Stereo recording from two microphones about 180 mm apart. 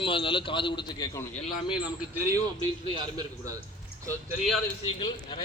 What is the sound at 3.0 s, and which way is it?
Speech, 20° right (ahead or behind).